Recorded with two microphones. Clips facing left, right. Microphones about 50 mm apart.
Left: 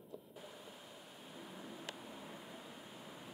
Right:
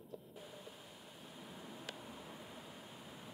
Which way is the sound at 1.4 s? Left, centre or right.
Centre.